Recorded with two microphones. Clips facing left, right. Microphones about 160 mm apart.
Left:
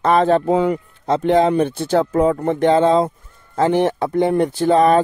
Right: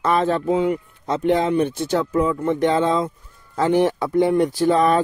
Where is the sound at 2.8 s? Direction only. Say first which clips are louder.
Left 6 dB; 30° left (ahead or behind).